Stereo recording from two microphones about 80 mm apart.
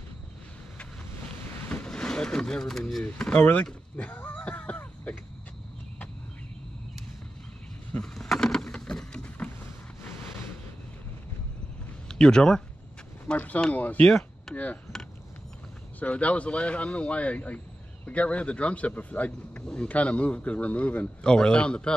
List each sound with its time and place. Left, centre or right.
1.7 s vehicle: centre
3.0 s speech: centre
3.9 s a sound: centre
8.0 s a sound: centre
12.1 s speech: centre
14.5 s chop: centre
16.0 s speech: centre